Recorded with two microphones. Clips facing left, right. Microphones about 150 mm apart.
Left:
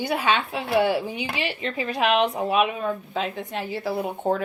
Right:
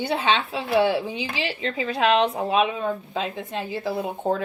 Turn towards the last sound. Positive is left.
turn(degrees=-25)  # may be behind; listen again after turning